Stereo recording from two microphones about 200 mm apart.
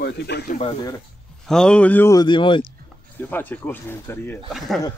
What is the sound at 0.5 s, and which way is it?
Speech, 25° left (ahead or behind).